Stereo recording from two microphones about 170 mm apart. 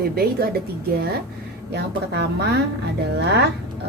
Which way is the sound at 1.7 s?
75° right (ahead or behind).